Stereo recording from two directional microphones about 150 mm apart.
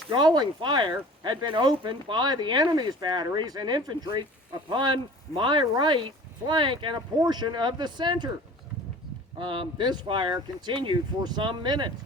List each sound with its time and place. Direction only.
0.1 s speech: 30° right (ahead or behind)
9.4 s speech: 35° right (ahead or behind)